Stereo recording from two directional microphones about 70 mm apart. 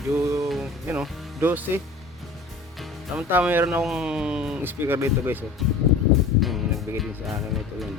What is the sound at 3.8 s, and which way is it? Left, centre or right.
Speech, centre.